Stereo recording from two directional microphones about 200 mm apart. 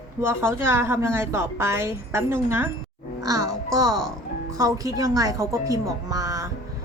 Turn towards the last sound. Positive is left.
turn(degrees=-15)  # may be behind; listen again after turning